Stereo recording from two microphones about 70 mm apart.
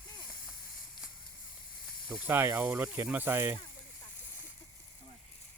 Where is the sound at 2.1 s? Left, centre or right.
Right.